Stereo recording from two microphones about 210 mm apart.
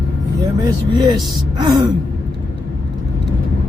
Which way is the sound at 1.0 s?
20° right (ahead or behind).